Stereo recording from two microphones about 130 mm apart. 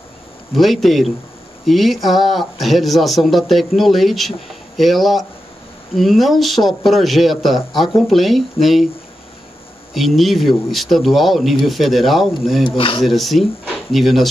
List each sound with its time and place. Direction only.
0.6 s speech: centre (ahead or behind)
9.9 s speech: centre (ahead or behind)
12.6 s speech: 40° left (ahead or behind)
13.0 s speech: centre (ahead or behind)